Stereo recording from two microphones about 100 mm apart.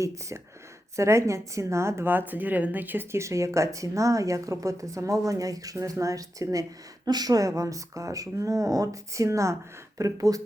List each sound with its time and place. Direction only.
0.9 s a woman's voice: 30° right (ahead or behind)